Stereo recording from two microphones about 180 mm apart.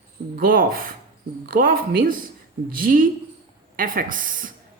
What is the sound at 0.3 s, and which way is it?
A woman's voice, 55° right (ahead or behind).